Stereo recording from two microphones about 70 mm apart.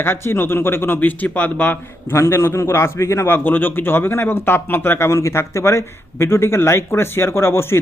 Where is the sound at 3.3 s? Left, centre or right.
Left.